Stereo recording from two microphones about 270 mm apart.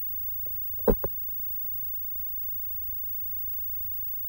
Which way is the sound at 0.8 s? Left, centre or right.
Right.